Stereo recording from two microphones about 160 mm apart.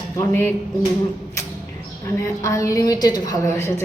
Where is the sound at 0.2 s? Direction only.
15° left (ahead or behind).